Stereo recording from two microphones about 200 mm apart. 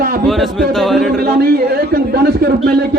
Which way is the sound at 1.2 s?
50° right (ahead or behind).